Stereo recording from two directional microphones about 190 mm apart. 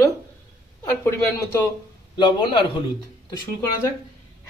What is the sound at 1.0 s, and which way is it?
A man's voice, 15° left (ahead or behind).